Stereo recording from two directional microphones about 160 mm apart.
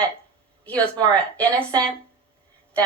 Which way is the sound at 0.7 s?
10° left (ahead or behind).